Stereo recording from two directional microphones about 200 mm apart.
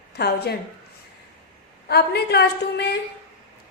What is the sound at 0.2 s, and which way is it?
Speech, 55° left (ahead or behind).